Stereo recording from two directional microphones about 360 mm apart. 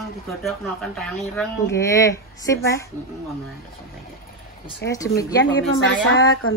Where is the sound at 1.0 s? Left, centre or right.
Centre.